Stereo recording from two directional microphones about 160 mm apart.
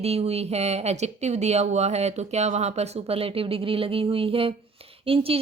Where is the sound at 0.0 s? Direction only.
40° right (ahead or behind).